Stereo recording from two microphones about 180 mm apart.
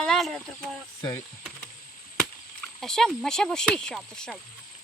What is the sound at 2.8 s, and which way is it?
Speech, 5° left (ahead or behind).